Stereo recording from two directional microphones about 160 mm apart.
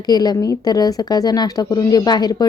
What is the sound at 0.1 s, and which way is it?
Speech, 25° left (ahead or behind).